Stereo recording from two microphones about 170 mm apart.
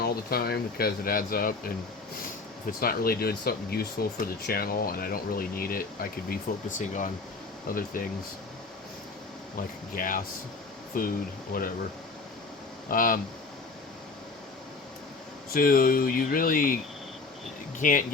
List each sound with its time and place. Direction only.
0.0 s speech: 65° left (ahead or behind)
2.8 s speech: 60° left (ahead or behind)
9.6 s speech: 55° left (ahead or behind)
12.9 s speech: 55° left (ahead or behind)
15.5 s speech: 60° left (ahead or behind)
17.7 s speech: 50° left (ahead or behind)